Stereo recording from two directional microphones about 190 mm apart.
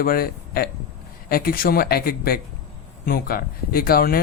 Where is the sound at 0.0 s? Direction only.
50° left (ahead or behind).